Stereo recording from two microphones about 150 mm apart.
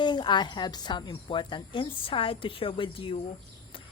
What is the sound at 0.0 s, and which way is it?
Speech, 30° left (ahead or behind).